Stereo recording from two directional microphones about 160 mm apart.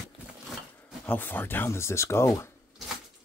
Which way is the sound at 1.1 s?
10° left (ahead or behind).